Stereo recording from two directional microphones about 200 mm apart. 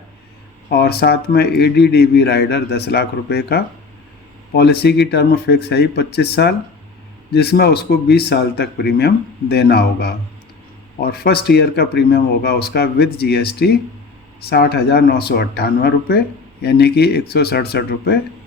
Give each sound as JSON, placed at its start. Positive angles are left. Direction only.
{"t": 0.7, "sound": "speech", "side_deg": 55}